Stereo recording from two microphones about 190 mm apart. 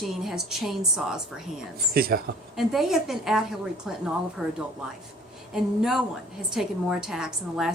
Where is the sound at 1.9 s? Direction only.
50° right (ahead or behind).